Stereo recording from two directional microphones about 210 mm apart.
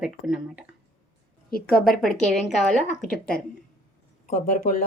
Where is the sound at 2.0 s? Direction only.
Centre (ahead or behind).